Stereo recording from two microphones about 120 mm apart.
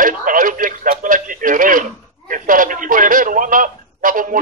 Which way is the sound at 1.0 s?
90° right.